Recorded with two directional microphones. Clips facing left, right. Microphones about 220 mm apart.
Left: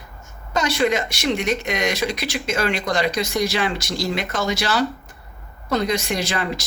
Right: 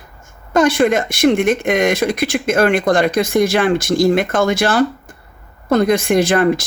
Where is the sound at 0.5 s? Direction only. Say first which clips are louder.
Right 7 dB; 50° right (ahead or behind).